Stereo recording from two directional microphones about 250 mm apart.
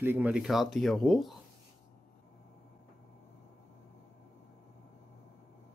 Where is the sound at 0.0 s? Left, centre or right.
Centre.